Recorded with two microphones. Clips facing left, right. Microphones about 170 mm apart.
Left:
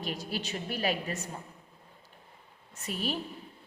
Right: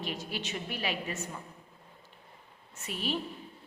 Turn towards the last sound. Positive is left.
turn(degrees=40)  # may be behind; listen again after turning